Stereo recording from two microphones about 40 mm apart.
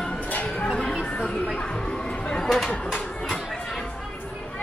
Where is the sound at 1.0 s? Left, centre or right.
Left.